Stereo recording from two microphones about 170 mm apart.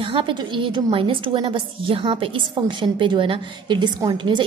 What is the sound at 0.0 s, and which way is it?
A woman's voice, 30° right (ahead or behind).